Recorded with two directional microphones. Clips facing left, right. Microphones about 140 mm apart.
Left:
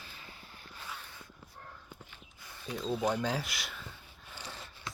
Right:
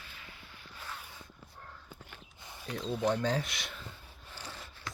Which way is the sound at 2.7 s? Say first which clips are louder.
Even; centre (ahead or behind).